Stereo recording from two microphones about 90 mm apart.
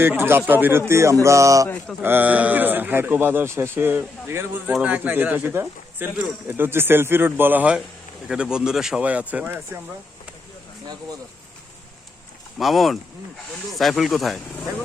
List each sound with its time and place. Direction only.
0.0 s a man's voice: 25° right (ahead or behind)
1.2 s a sound: 35° right (ahead or behind)
2.0 s a man's voice: 20° right (ahead or behind)
8.3 s speech: 10° right (ahead or behind)
12.5 s speech: centre (ahead or behind)